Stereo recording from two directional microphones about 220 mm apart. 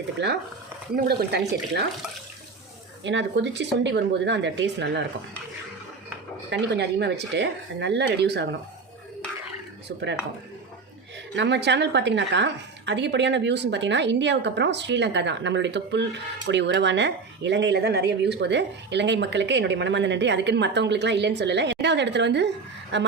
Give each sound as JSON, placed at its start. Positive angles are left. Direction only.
{"t": 0.2, "sound": "a woman's voice", "side_deg": -50}
{"t": 3.0, "sound": "a woman's voice", "side_deg": -55}
{"t": 6.5, "sound": "a woman's voice", "side_deg": -50}
{"t": 9.9, "sound": "a woman's voice", "side_deg": -55}
{"t": 11.3, "sound": "a woman's voice", "side_deg": -50}